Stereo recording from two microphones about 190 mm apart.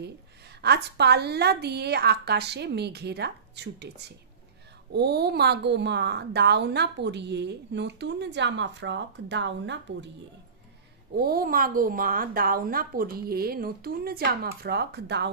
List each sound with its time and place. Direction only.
0.6 s a woman's voice: 60° right (ahead or behind)
11.1 s a woman's voice: 50° right (ahead or behind)